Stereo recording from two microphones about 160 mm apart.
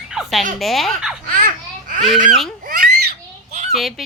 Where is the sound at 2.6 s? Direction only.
65° right (ahead or behind).